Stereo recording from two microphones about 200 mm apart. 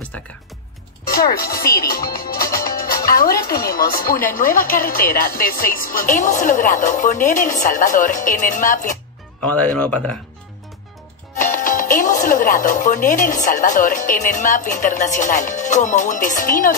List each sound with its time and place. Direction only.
1.0 s speech: 50° left (ahead or behind)
9.4 s speech: 5° left (ahead or behind)
11.3 s speech: 40° left (ahead or behind)